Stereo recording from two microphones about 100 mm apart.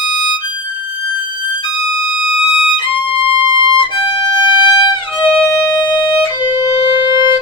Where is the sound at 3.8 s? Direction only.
50° left (ahead or behind).